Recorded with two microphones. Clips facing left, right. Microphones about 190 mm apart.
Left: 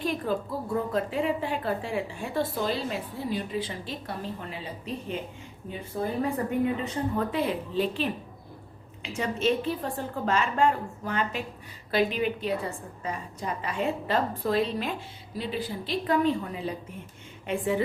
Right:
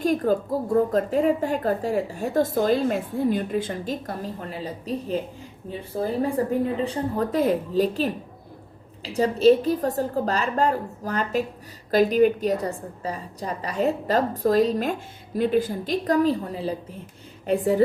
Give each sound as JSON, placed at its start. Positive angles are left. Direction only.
{"t": 0.0, "sound": "a woman's voice", "side_deg": -45}